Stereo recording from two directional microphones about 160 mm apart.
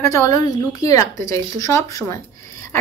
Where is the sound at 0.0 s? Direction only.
20° left (ahead or behind).